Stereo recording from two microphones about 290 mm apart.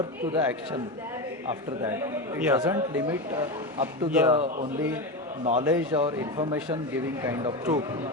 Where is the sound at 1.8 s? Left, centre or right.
Centre.